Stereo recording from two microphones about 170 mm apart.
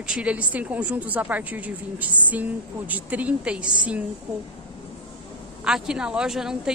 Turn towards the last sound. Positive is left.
turn(degrees=-5)  # may be behind; listen again after turning